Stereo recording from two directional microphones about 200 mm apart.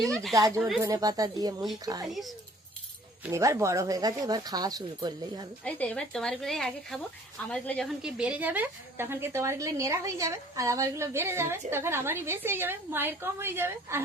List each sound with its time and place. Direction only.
0.0 s speech: centre (ahead or behind)
0.3 s a woman's voice: 15° right (ahead or behind)
2.0 s speech: centre (ahead or behind)
3.2 s a woman's voice: 15° right (ahead or behind)
5.6 s a woman's voice: 5° left (ahead or behind); by 14.0 s 10° right (ahead or behind)